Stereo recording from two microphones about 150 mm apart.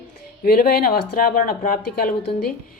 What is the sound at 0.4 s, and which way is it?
Speech, 75° left (ahead or behind).